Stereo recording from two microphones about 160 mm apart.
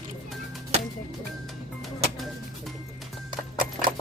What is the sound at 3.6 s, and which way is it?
Horse, 60° right (ahead or behind).